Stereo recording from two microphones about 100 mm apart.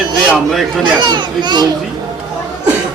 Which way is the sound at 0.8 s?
50° right (ahead or behind).